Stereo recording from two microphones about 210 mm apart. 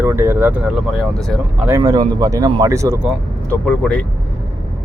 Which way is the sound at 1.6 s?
15° right (ahead or behind).